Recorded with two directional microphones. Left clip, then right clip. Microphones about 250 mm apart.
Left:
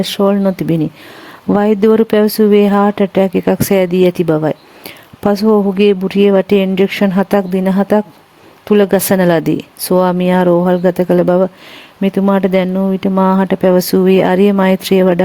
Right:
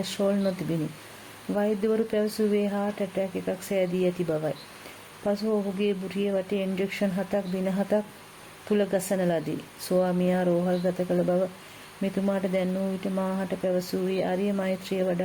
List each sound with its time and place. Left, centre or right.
0.0 s speech: left
1.5 s speech: left